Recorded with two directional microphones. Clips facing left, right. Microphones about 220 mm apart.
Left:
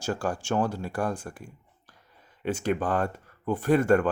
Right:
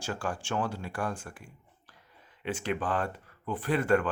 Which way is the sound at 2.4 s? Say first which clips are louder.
Left 5 dB; 45° left (ahead or behind).